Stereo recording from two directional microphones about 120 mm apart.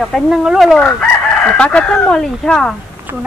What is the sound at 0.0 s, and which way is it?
Speech, centre (ahead or behind).